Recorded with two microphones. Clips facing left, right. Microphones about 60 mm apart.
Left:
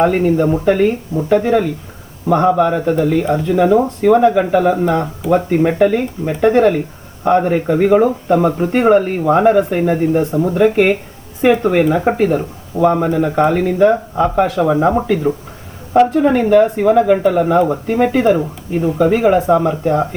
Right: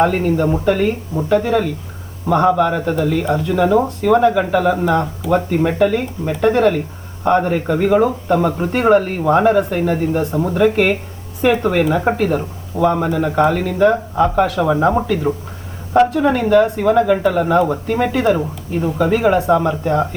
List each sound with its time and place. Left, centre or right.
0.0 s speech: centre
16.2 s speech: centre